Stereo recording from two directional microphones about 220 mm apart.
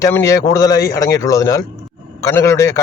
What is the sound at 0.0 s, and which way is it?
A man's voice, 15° left (ahead or behind).